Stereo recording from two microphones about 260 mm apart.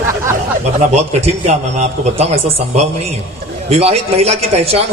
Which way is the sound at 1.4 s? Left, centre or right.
Right.